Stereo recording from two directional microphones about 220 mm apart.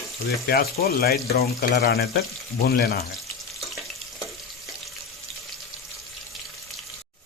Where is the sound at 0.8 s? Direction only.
45° left (ahead or behind).